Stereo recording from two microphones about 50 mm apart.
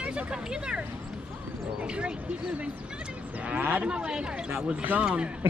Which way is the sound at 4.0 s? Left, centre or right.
Centre.